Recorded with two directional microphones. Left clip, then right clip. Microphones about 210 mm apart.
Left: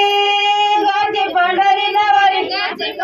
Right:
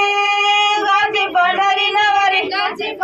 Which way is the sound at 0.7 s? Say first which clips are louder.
Even; 10° right (ahead or behind).